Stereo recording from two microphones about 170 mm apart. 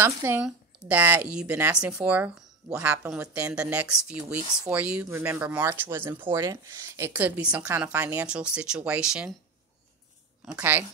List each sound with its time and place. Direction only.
0.0 s speech: 10° right (ahead or behind)
10.4 s speech: 5° right (ahead or behind)